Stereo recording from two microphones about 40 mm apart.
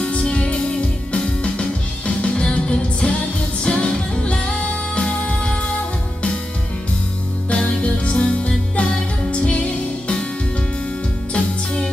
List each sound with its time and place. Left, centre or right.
0.0 s music: left
7.5 s music: left
11.3 s music: left